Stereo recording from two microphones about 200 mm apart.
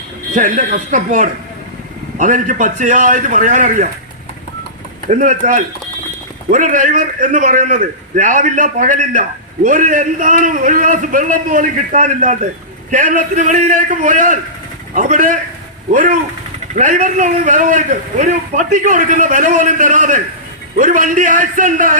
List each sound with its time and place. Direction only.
0.3 s a man's voice: 40° right (ahead or behind)
5.0 s a man's voice: 40° right (ahead or behind)